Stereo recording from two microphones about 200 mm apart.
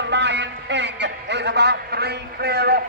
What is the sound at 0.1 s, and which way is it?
A man's voice, 60° right (ahead or behind).